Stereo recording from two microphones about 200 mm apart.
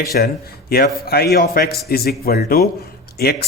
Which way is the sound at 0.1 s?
50° left (ahead or behind).